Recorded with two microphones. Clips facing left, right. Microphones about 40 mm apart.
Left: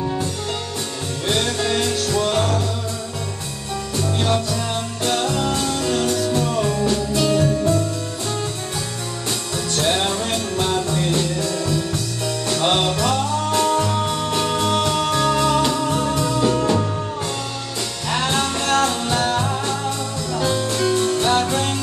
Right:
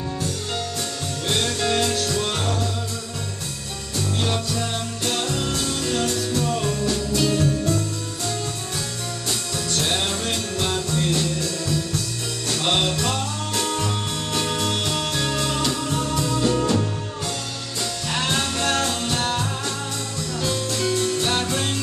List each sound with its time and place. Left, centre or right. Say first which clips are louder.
1.3 s music: left 2 dB; centre
4.2 s music: left 4 dB; centre
9.7 s music: left 4 dB; centre
13.5 s music: left 6 dB; centre
18.1 s music: left 4 dB; centre